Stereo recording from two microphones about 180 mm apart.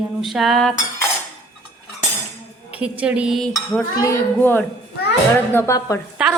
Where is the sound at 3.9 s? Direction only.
15° left (ahead or behind).